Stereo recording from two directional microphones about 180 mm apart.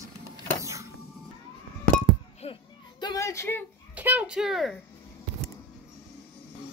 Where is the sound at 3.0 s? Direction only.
20° left (ahead or behind).